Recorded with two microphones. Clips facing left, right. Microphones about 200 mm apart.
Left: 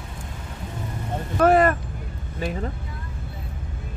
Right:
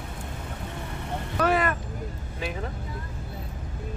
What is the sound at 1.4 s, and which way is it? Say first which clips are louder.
Vehicle: left 7 dB; 45° left (ahead or behind).